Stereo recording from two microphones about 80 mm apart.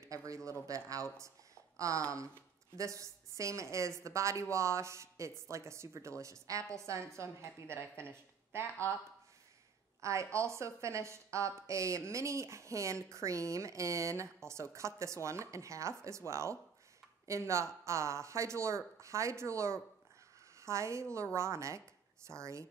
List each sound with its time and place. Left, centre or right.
0.0 s speech: right
8.6 s speech: centre
10.0 s a woman's voice: right